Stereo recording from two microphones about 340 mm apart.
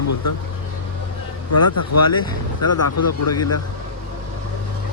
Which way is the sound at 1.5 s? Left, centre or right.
Left.